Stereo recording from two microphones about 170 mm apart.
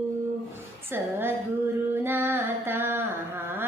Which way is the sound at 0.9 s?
15° right (ahead or behind).